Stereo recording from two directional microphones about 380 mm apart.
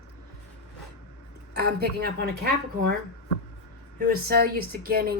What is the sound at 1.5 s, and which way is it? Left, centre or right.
Speech, right.